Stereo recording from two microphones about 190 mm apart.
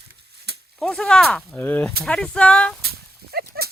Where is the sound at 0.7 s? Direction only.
Centre (ahead or behind).